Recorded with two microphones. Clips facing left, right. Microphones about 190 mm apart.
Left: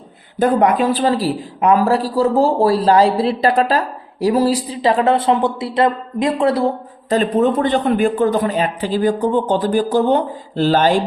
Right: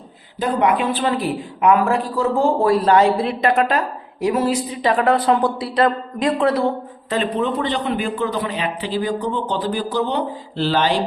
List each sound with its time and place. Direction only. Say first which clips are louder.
0.3 s a man's voice: left 4 dB; 45° left (ahead or behind)